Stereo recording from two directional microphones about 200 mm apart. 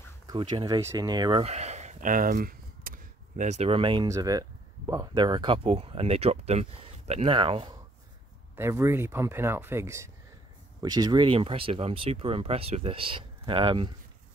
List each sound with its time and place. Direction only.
0.3 s speech: 20° right (ahead or behind)
8.5 s speech: 15° right (ahead or behind)